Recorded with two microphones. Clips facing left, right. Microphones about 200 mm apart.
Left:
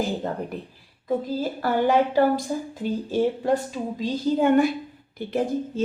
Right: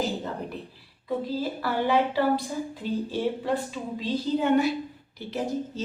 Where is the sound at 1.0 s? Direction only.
45° left (ahead or behind).